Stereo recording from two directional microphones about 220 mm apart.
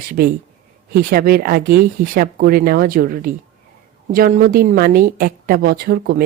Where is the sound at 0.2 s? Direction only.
45° right (ahead or behind).